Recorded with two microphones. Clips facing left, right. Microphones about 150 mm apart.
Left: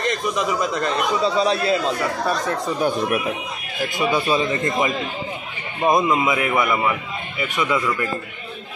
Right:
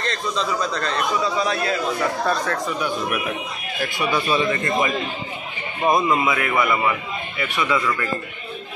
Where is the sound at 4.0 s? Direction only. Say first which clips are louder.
Left 2 dB; 20° left (ahead or behind).